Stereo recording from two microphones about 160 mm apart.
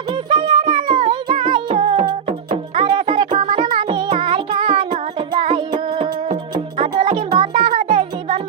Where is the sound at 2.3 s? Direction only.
45° right (ahead or behind).